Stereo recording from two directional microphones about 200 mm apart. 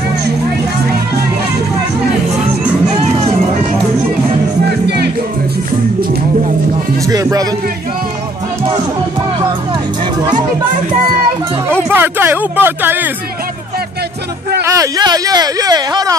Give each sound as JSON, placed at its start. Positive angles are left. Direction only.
{"t": 4.8, "sound": "music", "side_deg": -55}
{"t": 7.1, "sound": "music", "side_deg": -15}
{"t": 11.9, "sound": "speech", "side_deg": -10}
{"t": 14.6, "sound": "speech", "side_deg": -20}